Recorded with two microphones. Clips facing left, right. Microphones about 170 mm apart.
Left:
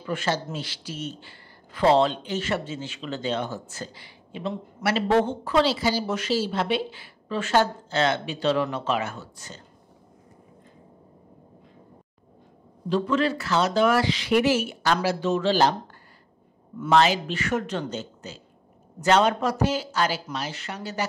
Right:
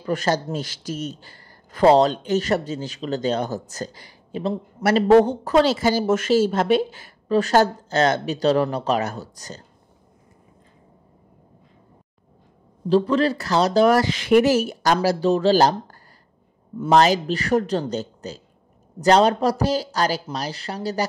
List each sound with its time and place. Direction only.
0.0 s speech: 40° right (ahead or behind)
12.8 s speech: 35° right (ahead or behind)
16.9 s speech: 40° right (ahead or behind)